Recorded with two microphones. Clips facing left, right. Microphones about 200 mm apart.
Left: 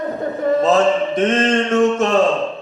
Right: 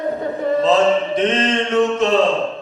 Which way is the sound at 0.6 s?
45° left (ahead or behind).